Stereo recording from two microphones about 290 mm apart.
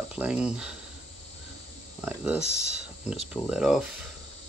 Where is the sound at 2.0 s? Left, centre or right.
Centre.